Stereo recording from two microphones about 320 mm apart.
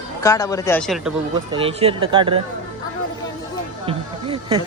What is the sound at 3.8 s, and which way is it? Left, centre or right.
Speech, centre.